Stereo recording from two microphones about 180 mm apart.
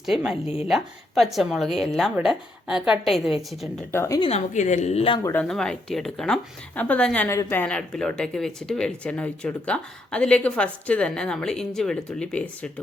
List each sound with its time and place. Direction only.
0.0 s speech: centre (ahead or behind)
0.4 s a woman's voice: 35° left (ahead or behind)
0.7 s speech: centre (ahead or behind)
3.9 s a woman's voice: 15° left (ahead or behind)
4.2 s a woman's voice: 35° left (ahead or behind)
5.2 s speech: 10° left (ahead or behind)